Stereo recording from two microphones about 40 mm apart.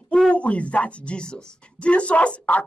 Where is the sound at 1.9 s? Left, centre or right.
Left.